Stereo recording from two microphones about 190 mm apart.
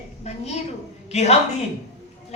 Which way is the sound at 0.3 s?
35° left (ahead or behind).